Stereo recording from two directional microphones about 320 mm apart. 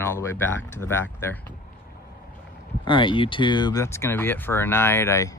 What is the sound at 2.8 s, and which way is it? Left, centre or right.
Speech, centre.